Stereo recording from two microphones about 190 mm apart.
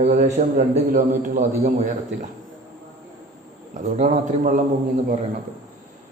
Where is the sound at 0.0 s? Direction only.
40° right (ahead or behind).